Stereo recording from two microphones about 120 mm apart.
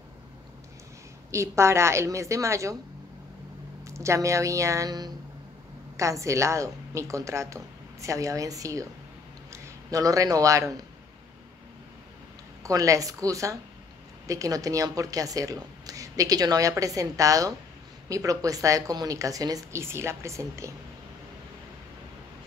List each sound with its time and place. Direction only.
1.3 s speech: 25° right (ahead or behind)
3.8 s a man's voice: 25° right (ahead or behind)
12.6 s speech: 30° right (ahead or behind)